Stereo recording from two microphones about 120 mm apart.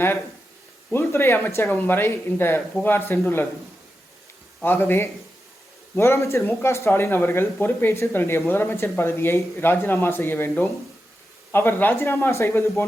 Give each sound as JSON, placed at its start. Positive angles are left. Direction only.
{"t": 0.9, "sound": "speech", "side_deg": 20}
{"t": 4.6, "sound": "speech", "side_deg": 15}